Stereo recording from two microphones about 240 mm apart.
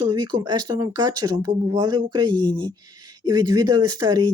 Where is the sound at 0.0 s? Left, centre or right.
Centre.